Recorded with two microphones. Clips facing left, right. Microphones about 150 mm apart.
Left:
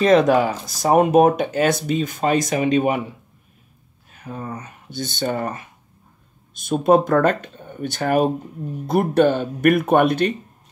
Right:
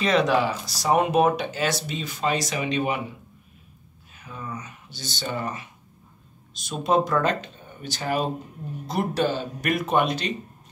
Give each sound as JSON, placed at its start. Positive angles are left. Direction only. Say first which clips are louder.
{"t": 0.0, "sound": "speech", "louder": "left 6 dB", "side_deg": 50}
{"t": 4.2, "sound": "speech", "louder": "left 5 dB", "side_deg": 45}